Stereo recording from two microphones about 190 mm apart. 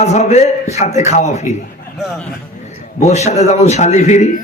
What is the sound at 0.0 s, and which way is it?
A man's voice, 35° left (ahead or behind).